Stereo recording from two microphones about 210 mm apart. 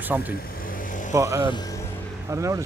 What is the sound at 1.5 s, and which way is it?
Music, 15° left (ahead or behind).